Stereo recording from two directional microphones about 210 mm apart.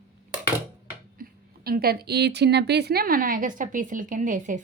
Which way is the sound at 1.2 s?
45° right (ahead or behind).